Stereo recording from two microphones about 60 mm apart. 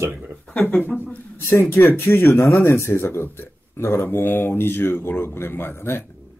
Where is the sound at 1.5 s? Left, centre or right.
Left.